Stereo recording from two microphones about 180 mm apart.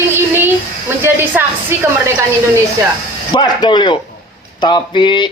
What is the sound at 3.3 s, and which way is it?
A woman's voice, 25° left (ahead or behind).